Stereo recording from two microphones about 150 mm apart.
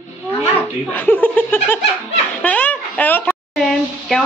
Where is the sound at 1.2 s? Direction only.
10° left (ahead or behind).